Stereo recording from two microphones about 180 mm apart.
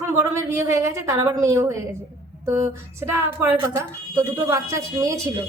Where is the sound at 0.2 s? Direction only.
15° right (ahead or behind).